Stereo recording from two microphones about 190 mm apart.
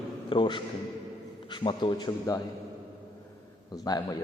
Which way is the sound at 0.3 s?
25° left (ahead or behind).